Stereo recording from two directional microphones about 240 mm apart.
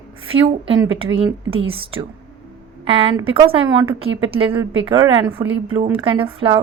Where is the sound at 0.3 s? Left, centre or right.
Right.